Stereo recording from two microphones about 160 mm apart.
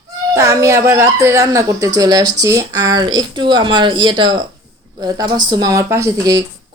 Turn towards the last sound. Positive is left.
turn(degrees=-20)  # may be behind; listen again after turning